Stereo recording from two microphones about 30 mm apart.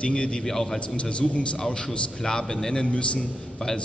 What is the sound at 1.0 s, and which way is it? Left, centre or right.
Speech, left.